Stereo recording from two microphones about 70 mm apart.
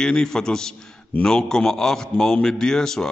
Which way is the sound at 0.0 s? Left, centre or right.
Centre.